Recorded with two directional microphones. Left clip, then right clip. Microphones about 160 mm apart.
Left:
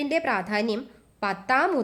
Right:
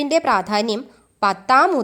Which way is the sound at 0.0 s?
25° right (ahead or behind).